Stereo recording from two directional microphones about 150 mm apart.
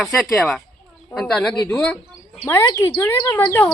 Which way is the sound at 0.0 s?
Centre (ahead or behind).